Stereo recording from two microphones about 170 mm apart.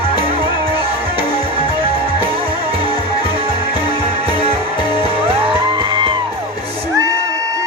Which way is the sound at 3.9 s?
30° right (ahead or behind).